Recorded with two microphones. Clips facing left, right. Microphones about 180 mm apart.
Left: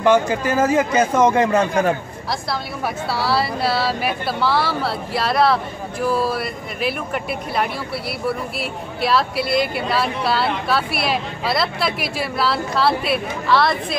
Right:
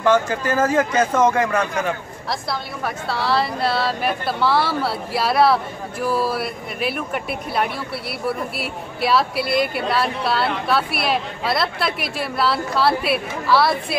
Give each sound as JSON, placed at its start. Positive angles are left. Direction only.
{"t": 0.0, "sound": "speech", "side_deg": 15}
{"t": 1.3, "sound": "speech", "side_deg": 25}
{"t": 2.5, "sound": "speech", "side_deg": 5}